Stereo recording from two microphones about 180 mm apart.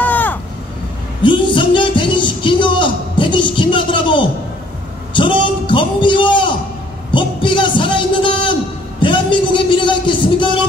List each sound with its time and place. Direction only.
0.0 s vehicle: 10° left (ahead or behind)
1.2 s speech: 25° left (ahead or behind)
5.1 s a sound: 25° left (ahead or behind)